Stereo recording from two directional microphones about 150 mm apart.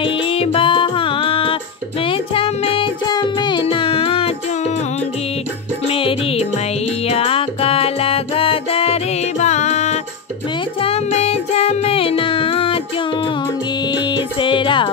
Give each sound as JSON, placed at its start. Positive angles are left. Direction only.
{"t": 0.0, "sound": "music", "side_deg": 40}
{"t": 5.9, "sound": "music", "side_deg": 40}
{"t": 9.4, "sound": "music", "side_deg": 50}
{"t": 13.9, "sound": "music", "side_deg": 30}